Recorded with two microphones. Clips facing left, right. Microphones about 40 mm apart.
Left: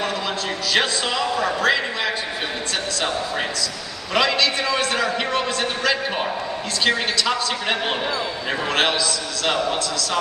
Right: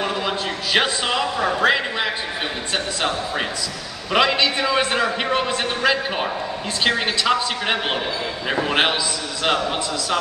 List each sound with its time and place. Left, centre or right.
0.7 s a man's voice: centre
4.1 s a man's voice: centre